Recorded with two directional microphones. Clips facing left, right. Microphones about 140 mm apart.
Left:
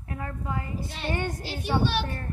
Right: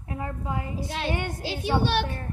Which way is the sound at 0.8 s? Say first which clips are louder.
Right 5 dB; 90° right.